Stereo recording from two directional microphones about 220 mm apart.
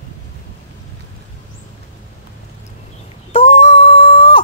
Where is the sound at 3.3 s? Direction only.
25° left (ahead or behind).